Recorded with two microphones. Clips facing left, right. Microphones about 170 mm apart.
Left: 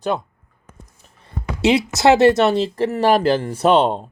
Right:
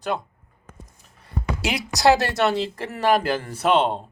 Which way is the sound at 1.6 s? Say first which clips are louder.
Left 14 dB; 25° left (ahead or behind).